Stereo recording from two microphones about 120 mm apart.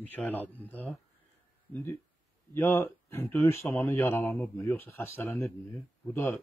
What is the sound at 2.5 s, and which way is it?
Speech, 20° left (ahead or behind).